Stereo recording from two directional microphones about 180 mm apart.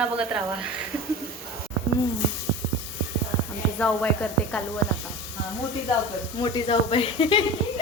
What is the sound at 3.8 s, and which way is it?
Speech, 5° left (ahead or behind).